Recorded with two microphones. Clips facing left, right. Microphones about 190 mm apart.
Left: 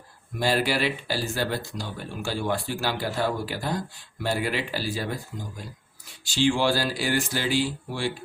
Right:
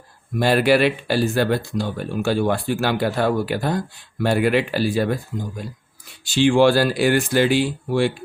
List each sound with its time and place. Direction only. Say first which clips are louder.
0.3 s speech: right 8 dB; 60° right (ahead or behind)
6.2 s speech: right 8 dB; 60° right (ahead or behind)